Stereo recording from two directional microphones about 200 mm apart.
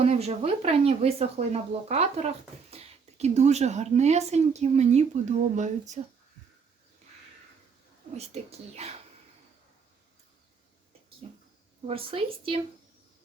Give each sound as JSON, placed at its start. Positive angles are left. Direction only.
{"t": 0.0, "sound": "speech", "side_deg": -30}
{"t": 8.1, "sound": "speech", "side_deg": -30}
{"t": 11.2, "sound": "a woman's voice", "side_deg": -30}